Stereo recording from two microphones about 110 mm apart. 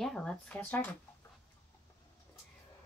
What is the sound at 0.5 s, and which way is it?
Speech, 15° left (ahead or behind).